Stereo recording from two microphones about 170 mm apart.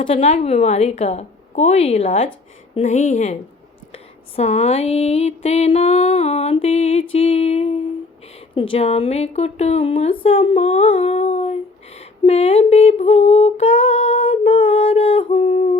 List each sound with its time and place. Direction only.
0.1 s a woman's voice: 40° left (ahead or behind)